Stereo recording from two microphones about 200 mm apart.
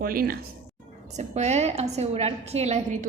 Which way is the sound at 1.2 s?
35° right (ahead or behind).